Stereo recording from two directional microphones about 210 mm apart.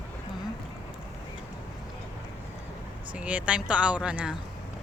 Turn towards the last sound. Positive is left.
turn(degrees=-5)  # may be behind; listen again after turning